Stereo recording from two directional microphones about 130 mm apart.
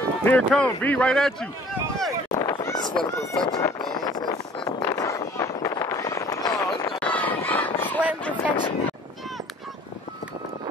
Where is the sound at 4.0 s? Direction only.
30° left (ahead or behind).